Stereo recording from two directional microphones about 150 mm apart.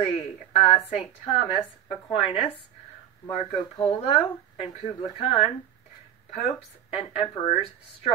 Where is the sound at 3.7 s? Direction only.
40° left (ahead or behind).